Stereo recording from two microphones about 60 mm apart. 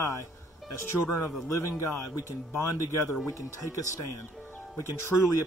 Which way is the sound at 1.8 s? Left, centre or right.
Left.